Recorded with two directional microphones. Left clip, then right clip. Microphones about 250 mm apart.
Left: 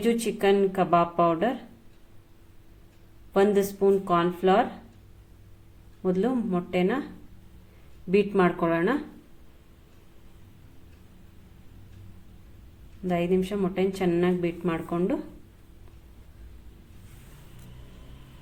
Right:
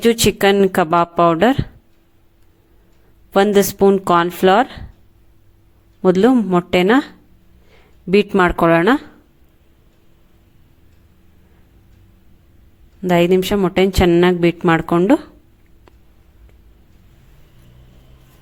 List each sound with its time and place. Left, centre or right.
0.0 s a woman's voice: right
3.3 s a woman's voice: right
6.0 s a woman's voice: right
8.1 s a woman's voice: right
13.1 s a woman's voice: right